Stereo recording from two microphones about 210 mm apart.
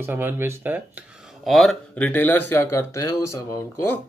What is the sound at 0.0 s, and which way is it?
Speech, 10° right (ahead or behind).